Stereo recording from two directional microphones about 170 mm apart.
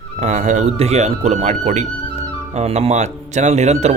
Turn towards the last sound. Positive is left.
turn(degrees=-40)  # may be behind; listen again after turning